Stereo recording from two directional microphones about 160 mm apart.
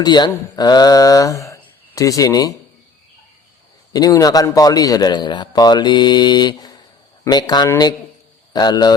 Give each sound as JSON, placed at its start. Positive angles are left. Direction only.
{"t": 0.0, "sound": "a man's voice", "side_deg": 25}
{"t": 3.9, "sound": "a man's voice", "side_deg": 25}